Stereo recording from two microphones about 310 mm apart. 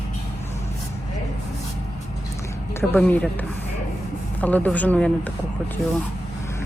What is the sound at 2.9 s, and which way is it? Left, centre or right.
Speech, centre.